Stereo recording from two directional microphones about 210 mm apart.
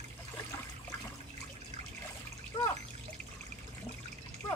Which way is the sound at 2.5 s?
25° left (ahead or behind).